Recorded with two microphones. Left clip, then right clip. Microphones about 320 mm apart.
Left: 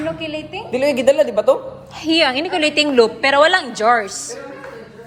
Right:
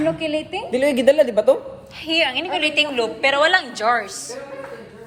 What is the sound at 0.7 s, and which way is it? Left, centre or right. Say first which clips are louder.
Speech: left 1 dB; right.